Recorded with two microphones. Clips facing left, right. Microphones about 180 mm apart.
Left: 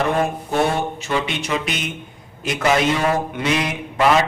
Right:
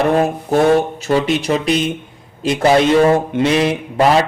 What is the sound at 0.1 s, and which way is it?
A man's voice, 35° right (ahead or behind).